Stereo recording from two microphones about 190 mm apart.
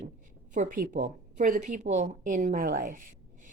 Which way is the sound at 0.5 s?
45° right (ahead or behind).